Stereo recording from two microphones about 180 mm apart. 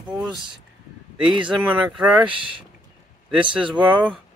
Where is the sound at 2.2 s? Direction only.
30° right (ahead or behind).